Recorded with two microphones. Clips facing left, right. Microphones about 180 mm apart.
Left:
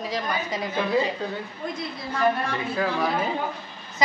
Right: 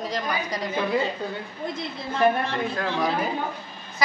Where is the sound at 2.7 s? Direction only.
5° left (ahead or behind).